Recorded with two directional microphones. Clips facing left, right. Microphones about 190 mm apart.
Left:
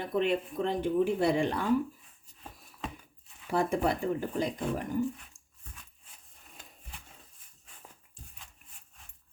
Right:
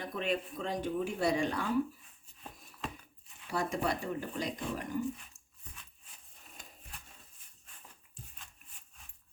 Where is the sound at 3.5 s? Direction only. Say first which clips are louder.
Left 5 dB; 55° left (ahead or behind).